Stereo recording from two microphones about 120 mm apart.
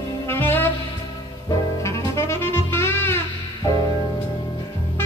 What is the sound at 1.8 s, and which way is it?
Saxophone, 25° left (ahead or behind).